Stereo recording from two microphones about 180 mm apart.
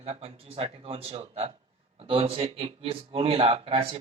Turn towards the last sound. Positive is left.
turn(degrees=-30)  # may be behind; listen again after turning